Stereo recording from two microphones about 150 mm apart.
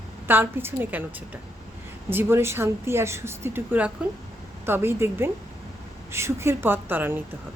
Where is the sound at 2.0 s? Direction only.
15° right (ahead or behind).